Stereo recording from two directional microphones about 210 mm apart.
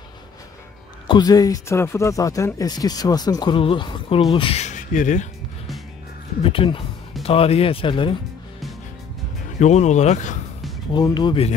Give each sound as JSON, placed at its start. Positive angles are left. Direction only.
{"t": 1.0, "sound": "speech", "side_deg": 20}
{"t": 6.4, "sound": "speech", "side_deg": 25}
{"t": 9.6, "sound": "speech", "side_deg": 35}
{"t": 10.9, "sound": "speech", "side_deg": 20}